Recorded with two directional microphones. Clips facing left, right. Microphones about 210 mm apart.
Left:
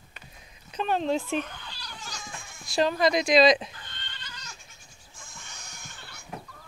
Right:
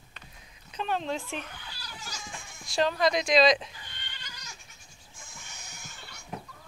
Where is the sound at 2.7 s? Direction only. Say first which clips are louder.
Left 2 dB; 5° left (ahead or behind).